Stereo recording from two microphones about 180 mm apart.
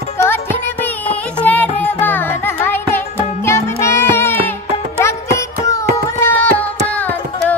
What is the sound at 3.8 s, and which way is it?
Child singing, 15° left (ahead or behind).